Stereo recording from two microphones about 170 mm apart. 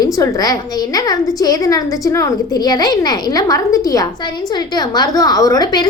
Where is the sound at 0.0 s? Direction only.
20° left (ahead or behind).